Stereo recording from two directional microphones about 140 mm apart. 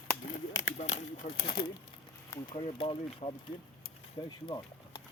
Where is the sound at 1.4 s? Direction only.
35° left (ahead or behind).